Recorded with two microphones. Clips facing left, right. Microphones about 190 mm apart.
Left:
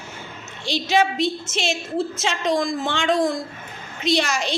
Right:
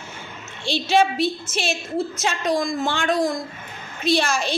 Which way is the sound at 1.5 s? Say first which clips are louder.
Even; 20° left (ahead or behind).